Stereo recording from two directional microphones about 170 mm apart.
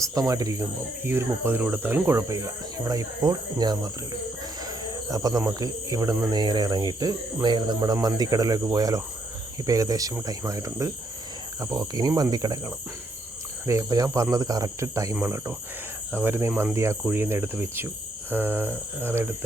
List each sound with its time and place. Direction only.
0.0 s speech: 20° right (ahead or behind)